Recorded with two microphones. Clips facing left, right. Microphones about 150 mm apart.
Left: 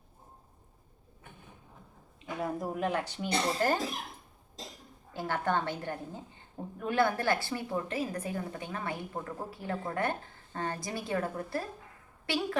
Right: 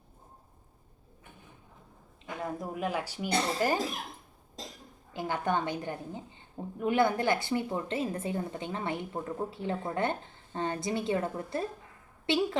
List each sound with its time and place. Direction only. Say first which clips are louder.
2.4 s speech: left 2 dB; centre (ahead or behind)
5.1 s a woman's voice: right 1 dB; 15° right (ahead or behind)